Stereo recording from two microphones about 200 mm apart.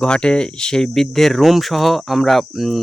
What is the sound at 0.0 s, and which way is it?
Speech, 5° left (ahead or behind).